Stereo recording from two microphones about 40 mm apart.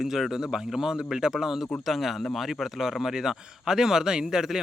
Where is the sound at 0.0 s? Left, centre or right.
Centre.